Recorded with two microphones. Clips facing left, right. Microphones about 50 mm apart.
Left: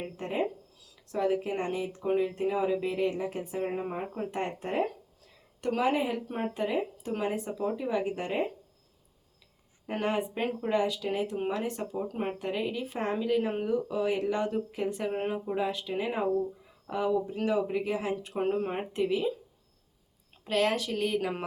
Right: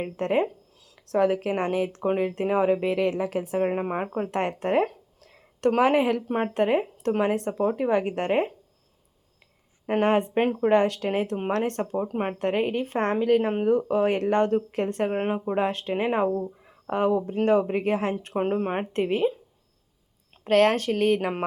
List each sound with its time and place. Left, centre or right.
0.0 s speech: right
0.9 s speech: right
2.0 s speech: right
2.8 s speech: right
5.2 s a sound: right
6.2 s speech: right
9.8 s speech: right
12.0 s speech: right
12.4 s speech: right
20.4 s speech: right